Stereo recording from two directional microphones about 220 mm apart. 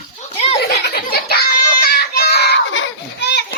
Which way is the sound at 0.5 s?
45° left (ahead or behind).